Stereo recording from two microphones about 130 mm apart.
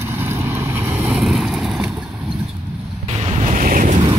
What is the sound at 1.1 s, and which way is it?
Boat, centre (ahead or behind).